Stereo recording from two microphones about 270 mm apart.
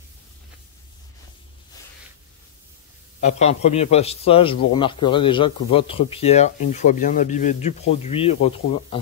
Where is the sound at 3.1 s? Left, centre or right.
Left.